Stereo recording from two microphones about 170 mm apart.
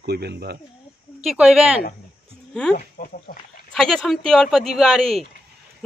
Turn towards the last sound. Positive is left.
turn(degrees=0)  # may be behind; listen again after turning